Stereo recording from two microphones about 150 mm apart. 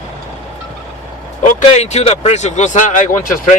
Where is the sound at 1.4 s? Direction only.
50° left (ahead or behind).